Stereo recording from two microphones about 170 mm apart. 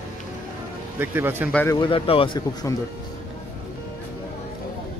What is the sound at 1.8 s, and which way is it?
Speech, 30° left (ahead or behind).